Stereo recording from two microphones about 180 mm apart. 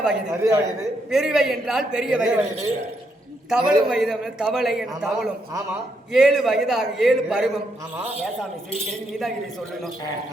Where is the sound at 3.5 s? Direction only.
5° right (ahead or behind).